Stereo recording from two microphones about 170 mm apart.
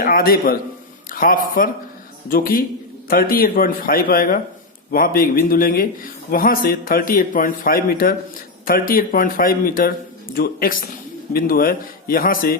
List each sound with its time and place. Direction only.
0.0 s a man's voice: 60° left (ahead or behind)
1.1 s a sound: 55° left (ahead or behind)
2.3 s a man's voice: 55° left (ahead or behind)